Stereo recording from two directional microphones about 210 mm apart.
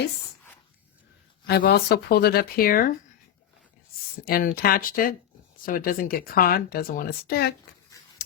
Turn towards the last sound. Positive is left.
turn(degrees=50)  # may be behind; listen again after turning